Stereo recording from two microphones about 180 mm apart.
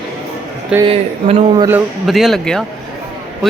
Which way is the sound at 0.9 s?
30° right (ahead or behind).